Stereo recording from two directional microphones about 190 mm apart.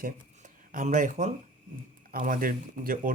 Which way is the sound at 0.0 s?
45° right (ahead or behind).